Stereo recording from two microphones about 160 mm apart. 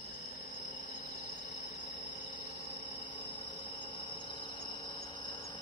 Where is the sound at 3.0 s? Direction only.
30° left (ahead or behind).